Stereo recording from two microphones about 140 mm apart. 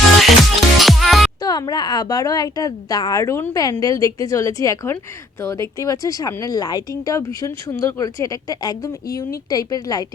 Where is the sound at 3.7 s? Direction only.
25° left (ahead or behind).